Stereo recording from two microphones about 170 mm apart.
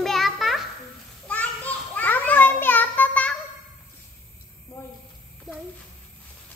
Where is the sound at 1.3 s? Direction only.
10° left (ahead or behind).